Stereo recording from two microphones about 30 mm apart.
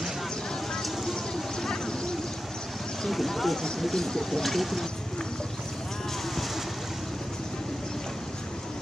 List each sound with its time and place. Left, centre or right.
1.6 s vehicle: left
3.0 s speech: centre
4.4 s a sound: centre